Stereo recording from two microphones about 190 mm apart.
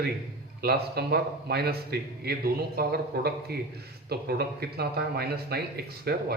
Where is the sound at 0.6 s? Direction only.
55° right (ahead or behind).